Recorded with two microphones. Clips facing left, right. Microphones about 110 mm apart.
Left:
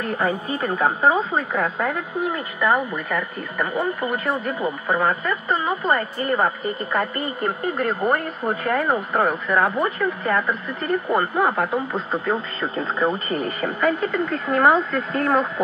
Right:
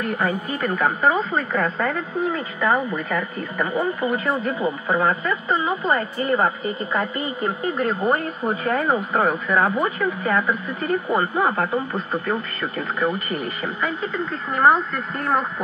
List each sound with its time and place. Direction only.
0.0 s speech: 35° left (ahead or behind)
1.6 s speech: 10° left (ahead or behind)
11.9 s speech: 25° left (ahead or behind)
13.6 s speech: 50° left (ahead or behind)